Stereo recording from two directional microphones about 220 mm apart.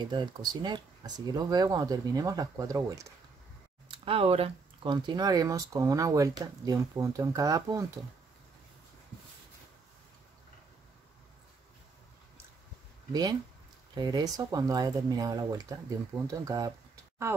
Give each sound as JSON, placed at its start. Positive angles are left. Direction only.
{"t": 0.0, "sound": "speech", "side_deg": -20}
{"t": 13.1, "sound": "speech", "side_deg": -20}